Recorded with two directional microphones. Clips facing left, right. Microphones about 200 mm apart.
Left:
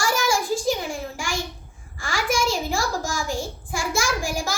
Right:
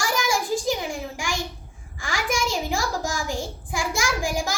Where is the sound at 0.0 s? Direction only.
15° right (ahead or behind).